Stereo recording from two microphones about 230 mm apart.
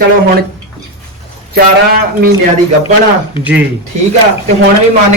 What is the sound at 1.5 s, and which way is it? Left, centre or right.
Speech, right.